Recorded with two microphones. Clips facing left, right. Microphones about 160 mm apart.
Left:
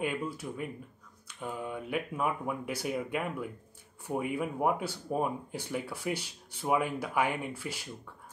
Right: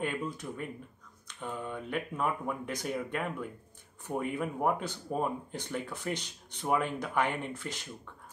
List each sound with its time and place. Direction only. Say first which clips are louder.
0.0 s speech: left 1 dB; 10° left (ahead or behind)